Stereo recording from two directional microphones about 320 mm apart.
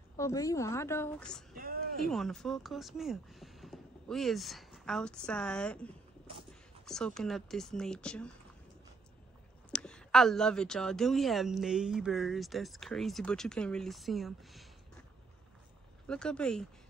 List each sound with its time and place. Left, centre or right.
0.2 s a woman's voice: centre
1.5 s a sound: right
2.0 s speech: centre
6.9 s speech: centre
9.7 s speech: centre
16.1 s speech: centre